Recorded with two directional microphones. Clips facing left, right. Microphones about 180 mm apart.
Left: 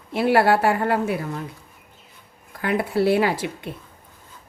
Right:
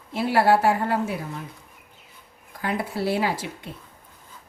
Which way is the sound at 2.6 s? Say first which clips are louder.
Left 6 dB; 65° left (ahead or behind).